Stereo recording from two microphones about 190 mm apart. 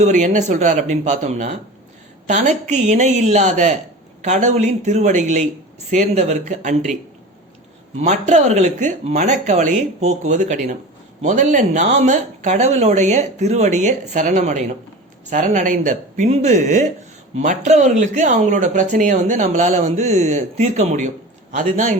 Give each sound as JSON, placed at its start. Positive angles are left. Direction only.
{"t": 0.0, "sound": "a woman's voice", "side_deg": -40}
{"t": 7.9, "sound": "a woman's voice", "side_deg": -35}